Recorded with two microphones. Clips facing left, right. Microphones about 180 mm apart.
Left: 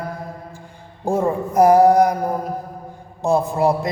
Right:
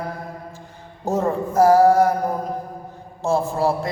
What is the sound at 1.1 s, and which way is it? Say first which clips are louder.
Speech: left 2 dB; 10° left (ahead or behind).